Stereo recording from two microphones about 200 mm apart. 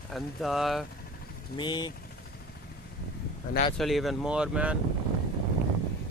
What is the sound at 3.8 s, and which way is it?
Speech, centre (ahead or behind).